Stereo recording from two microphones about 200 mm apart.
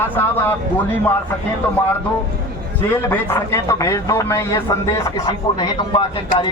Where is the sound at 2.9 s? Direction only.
10° left (ahead or behind).